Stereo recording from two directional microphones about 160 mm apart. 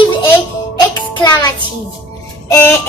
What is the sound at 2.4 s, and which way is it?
Music, 15° left (ahead or behind).